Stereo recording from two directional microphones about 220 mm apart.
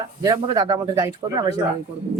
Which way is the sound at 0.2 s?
15° right (ahead or behind).